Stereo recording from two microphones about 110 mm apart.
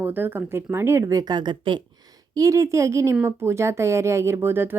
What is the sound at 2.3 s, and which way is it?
A woman's voice, 30° right (ahead or behind).